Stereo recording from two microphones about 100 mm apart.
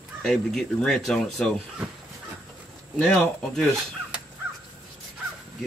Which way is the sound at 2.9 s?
10° left (ahead or behind).